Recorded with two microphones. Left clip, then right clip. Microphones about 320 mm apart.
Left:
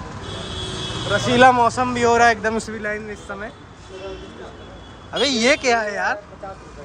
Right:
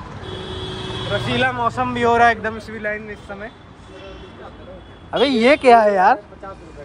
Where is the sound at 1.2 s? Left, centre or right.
Left.